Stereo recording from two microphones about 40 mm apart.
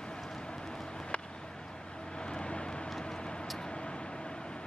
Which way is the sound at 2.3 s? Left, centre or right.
Left.